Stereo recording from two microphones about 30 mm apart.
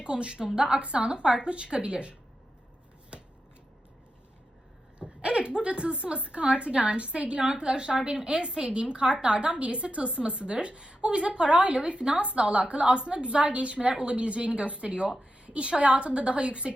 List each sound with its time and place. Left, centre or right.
0.0 s a woman's voice: right
4.9 s a sound: right
5.6 s a woman's voice: right
15.8 s a woman's voice: right